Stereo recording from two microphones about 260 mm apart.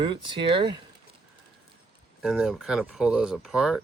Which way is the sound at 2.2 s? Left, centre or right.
Centre.